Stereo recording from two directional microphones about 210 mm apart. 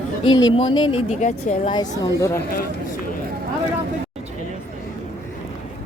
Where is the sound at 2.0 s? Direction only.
15° left (ahead or behind).